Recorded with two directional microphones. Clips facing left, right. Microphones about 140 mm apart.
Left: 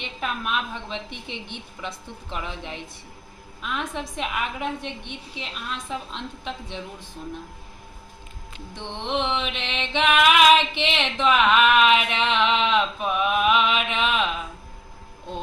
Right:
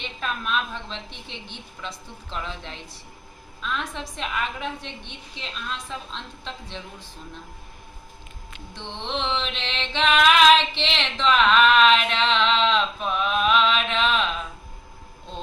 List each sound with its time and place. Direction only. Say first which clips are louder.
0.2 s a woman's voice: even; 15° left (ahead or behind)
8.7 s a woman's voice: left 3 dB; 15° left (ahead or behind)